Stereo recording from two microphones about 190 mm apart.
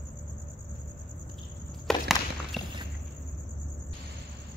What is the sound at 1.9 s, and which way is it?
Walk, centre (ahead or behind).